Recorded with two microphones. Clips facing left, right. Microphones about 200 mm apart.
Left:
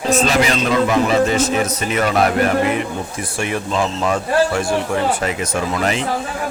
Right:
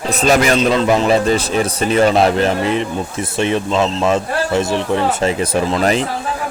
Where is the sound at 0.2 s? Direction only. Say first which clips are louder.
Right 6 dB; 45° right (ahead or behind).